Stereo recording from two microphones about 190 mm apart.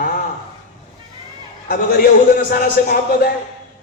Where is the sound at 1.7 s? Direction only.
50° left (ahead or behind).